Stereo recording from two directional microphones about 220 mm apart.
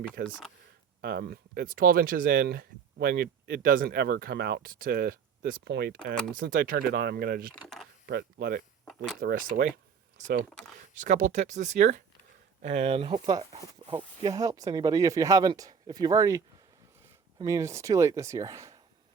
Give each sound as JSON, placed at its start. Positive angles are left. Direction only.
{"t": 0.2, "sound": "speech", "side_deg": -50}
{"t": 7.5, "sound": "speech", "side_deg": 0}
{"t": 8.0, "sound": "speech", "side_deg": -45}
{"t": 8.8, "sound": "a sound", "side_deg": 5}
{"t": 9.2, "sound": "speech", "side_deg": -40}